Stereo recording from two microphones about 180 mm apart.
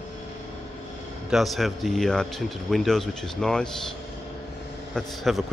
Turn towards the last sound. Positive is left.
turn(degrees=0)  # may be behind; listen again after turning